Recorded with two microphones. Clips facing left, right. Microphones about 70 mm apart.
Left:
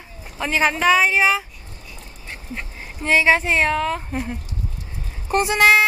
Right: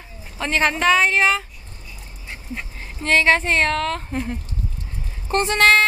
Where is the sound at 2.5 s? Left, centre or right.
Centre.